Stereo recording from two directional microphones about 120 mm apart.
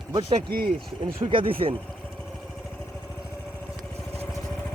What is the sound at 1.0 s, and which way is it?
Speech, 45° right (ahead or behind).